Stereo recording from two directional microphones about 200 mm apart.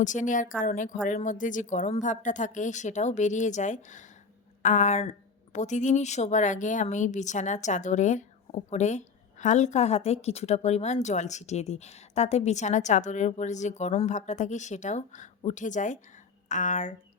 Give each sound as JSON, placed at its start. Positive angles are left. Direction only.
{"t": 0.0, "sound": "speech", "side_deg": 40}